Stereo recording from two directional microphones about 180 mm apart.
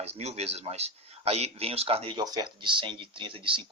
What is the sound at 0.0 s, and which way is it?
Speech, 35° right (ahead or behind).